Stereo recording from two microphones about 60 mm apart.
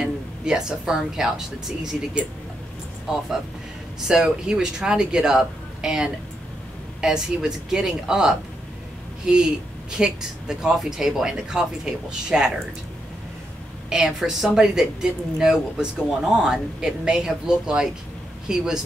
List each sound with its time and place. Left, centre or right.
0.0 s a woman's voice: centre
13.8 s a woman's voice: centre